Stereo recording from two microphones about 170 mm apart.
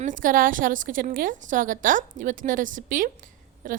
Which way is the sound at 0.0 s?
50° right (ahead or behind).